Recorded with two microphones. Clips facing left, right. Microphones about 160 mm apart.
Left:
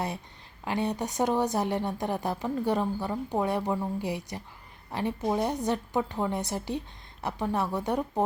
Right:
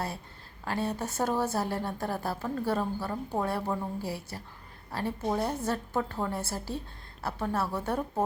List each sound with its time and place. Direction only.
0.6 s a woman's voice: 15° left (ahead or behind)